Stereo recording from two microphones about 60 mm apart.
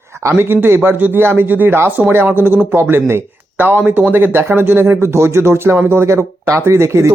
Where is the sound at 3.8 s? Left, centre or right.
Right.